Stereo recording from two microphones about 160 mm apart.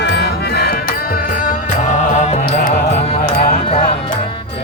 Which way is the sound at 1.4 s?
55° left (ahead or behind).